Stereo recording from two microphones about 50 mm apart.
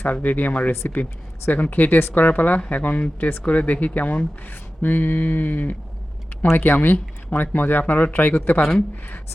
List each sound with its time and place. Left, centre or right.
0.0 s speech: left